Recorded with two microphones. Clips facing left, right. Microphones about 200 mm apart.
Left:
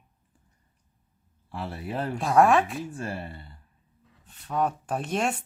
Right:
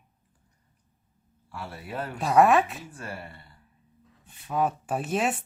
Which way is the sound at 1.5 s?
30° left (ahead or behind).